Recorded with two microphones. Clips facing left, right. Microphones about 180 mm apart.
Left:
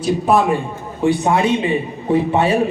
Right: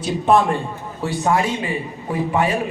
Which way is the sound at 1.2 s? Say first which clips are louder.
Left 4 dB; 20° left (ahead or behind).